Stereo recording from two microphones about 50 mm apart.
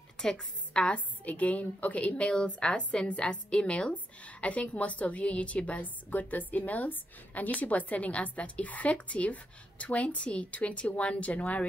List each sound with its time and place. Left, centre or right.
0.2 s a woman's voice: centre
0.9 s a woman's voice: left